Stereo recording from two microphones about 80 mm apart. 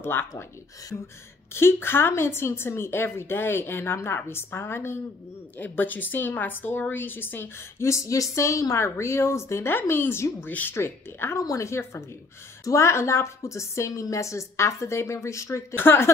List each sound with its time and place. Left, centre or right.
0.0 s a woman's voice: left
0.3 s speech: left
1.5 s a woman's voice: left
15.7 s a woman's voice: left